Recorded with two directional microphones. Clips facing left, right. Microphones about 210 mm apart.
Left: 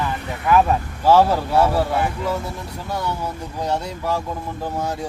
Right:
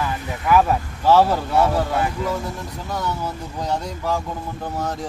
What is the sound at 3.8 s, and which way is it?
Speech, 10° left (ahead or behind).